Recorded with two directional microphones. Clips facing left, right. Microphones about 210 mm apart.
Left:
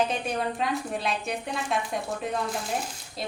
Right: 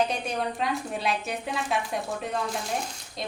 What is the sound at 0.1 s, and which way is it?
A woman's voice, centre (ahead or behind).